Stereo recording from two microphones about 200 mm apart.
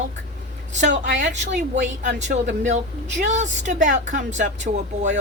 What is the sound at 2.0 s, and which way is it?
Speech, 35° right (ahead or behind).